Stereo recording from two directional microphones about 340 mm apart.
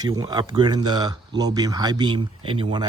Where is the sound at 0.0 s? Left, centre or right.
Centre.